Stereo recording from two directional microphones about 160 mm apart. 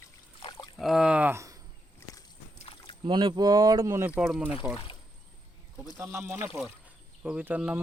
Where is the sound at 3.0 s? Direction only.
30° right (ahead or behind); by 4.6 s 5° right (ahead or behind).